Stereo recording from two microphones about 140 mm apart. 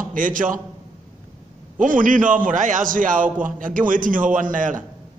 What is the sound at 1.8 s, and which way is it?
A man's voice, 70° right (ahead or behind).